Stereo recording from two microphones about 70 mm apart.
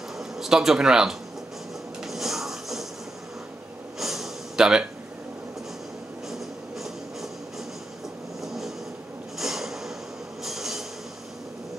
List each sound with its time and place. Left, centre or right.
0.4 s speech: centre
2.0 s a sound: centre
4.0 s a sound: centre
6.3 s train: centre
8.5 s vehicle: centre
9.4 s snort: centre
10.4 s train: centre